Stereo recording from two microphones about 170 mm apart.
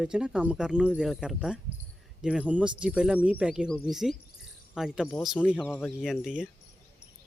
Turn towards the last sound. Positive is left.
turn(degrees=-5)  # may be behind; listen again after turning